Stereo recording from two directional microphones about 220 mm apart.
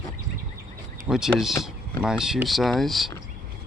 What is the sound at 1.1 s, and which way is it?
Speech, centre (ahead or behind).